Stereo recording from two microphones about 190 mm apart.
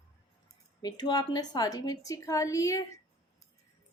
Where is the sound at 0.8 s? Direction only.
20° left (ahead or behind).